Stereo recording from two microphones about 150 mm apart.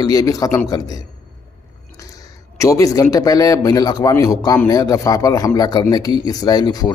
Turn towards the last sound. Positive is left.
turn(degrees=25)  # may be behind; listen again after turning